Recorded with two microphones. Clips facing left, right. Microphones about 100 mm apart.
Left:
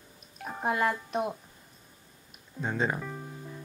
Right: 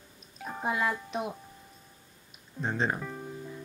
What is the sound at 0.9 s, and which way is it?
Speech, centre (ahead or behind).